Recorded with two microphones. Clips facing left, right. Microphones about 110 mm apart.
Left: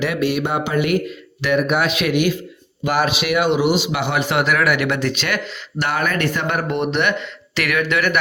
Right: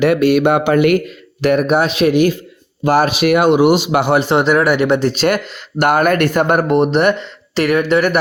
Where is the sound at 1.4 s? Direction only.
45° right (ahead or behind).